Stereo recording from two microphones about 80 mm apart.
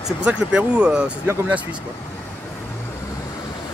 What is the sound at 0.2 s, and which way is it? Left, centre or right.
Speech, centre.